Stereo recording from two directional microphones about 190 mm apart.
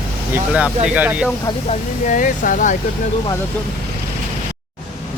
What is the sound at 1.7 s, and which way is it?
Speech, 40° left (ahead or behind).